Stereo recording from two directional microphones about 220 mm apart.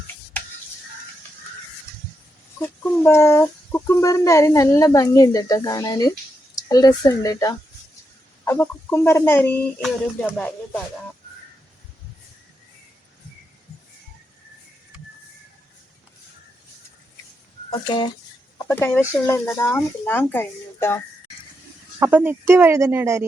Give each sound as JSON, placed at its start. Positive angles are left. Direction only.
{"t": 2.6, "sound": "speech", "side_deg": 10}
{"t": 17.7, "sound": "speech", "side_deg": 20}
{"t": 22.0, "sound": "speech", "side_deg": -10}